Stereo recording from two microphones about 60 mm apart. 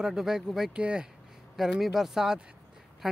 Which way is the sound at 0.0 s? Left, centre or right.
Centre.